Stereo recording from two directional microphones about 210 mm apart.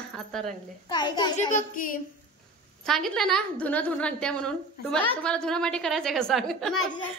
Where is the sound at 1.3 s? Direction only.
40° left (ahead or behind).